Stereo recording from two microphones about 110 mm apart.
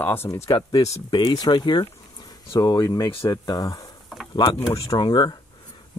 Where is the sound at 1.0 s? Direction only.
45° left (ahead or behind).